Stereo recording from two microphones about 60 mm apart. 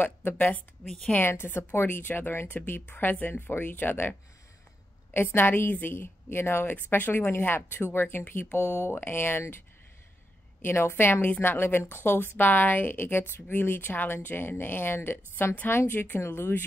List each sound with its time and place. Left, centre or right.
0.0 s a woman's voice: left
0.8 s a woman's voice: centre
1.2 s a woman's voice: left
5.1 s a woman's voice: left
8.5 s speech: left
8.9 s a woman's voice: left
10.6 s a woman's voice: left